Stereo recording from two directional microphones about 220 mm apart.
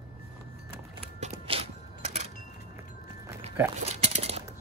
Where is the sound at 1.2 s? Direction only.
25° right (ahead or behind).